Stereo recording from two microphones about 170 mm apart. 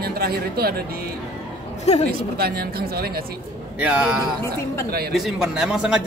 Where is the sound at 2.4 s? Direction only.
65° right (ahead or behind).